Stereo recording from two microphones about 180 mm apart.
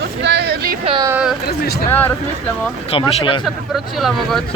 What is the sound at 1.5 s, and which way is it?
Speech, 60° left (ahead or behind).